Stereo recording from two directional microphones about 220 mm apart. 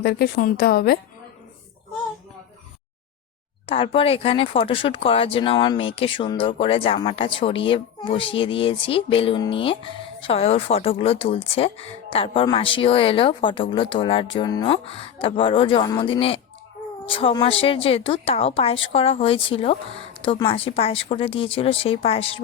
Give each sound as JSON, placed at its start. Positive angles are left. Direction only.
{"t": 0.0, "sound": "a woman's voice", "side_deg": 45}
{"t": 3.7, "sound": "speech", "side_deg": 25}